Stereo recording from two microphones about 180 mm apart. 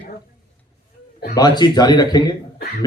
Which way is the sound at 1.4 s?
25° left (ahead or behind).